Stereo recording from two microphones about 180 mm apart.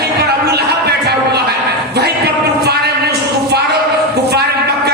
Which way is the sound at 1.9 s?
65° right (ahead or behind).